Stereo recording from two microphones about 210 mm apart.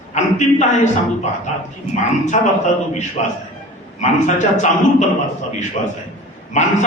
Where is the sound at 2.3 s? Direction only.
30° left (ahead or behind).